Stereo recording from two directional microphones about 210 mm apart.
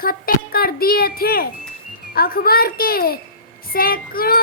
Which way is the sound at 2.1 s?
45° left (ahead or behind).